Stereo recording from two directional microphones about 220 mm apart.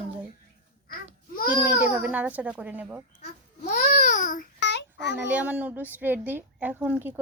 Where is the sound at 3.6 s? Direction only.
35° left (ahead or behind).